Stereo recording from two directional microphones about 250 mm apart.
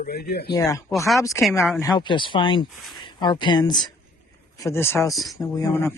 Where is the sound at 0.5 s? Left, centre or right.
Centre.